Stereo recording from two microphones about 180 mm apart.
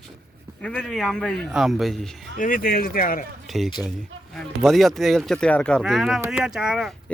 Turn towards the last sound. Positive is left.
turn(degrees=-5)  # may be behind; listen again after turning